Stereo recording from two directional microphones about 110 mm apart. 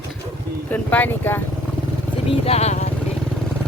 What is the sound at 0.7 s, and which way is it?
Speech, 15° left (ahead or behind).